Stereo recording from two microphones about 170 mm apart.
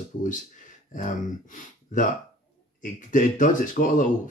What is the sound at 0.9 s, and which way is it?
Speech, 50° left (ahead or behind).